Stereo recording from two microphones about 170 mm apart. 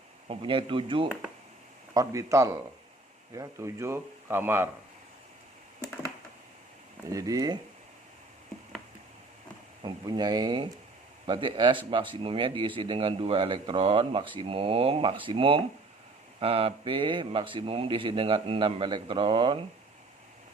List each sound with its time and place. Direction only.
0.3 s speech: 30° right (ahead or behind)
1.0 s speech: 5° right (ahead or behind)
1.9 s speech: 20° right (ahead or behind)
7.1 s speech: 20° right (ahead or behind)
9.8 s speech: 25° right (ahead or behind)